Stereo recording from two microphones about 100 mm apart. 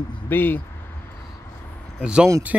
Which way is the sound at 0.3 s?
20° left (ahead or behind).